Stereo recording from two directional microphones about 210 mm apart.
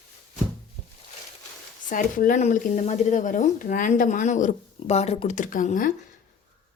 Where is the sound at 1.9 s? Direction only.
40° left (ahead or behind).